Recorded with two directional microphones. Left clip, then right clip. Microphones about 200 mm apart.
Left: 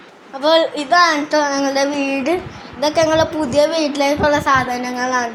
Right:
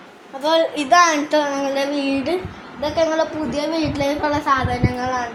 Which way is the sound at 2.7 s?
50° left (ahead or behind).